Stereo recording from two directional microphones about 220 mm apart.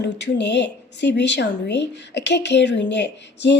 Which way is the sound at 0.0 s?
50° left (ahead or behind).